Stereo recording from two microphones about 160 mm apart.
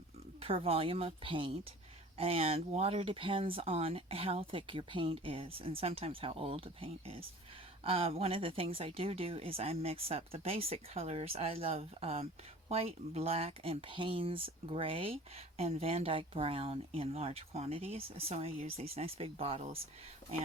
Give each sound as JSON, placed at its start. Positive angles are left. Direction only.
{"t": 0.3, "sound": "speech", "side_deg": -35}